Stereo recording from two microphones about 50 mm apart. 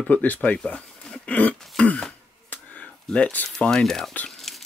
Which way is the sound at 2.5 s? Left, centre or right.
Left.